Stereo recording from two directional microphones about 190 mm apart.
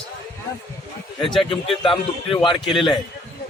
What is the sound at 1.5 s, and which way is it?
A man's voice, 25° left (ahead or behind).